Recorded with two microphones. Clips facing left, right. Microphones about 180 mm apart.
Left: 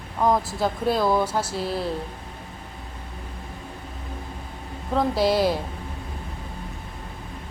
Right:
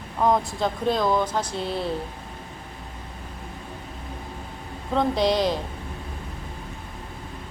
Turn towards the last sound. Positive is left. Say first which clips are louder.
# left 1 dB
turn(degrees=5)  # may be behind; listen again after turning